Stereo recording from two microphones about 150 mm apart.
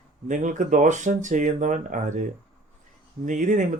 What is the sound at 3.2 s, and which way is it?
Speech, 55° right (ahead or behind).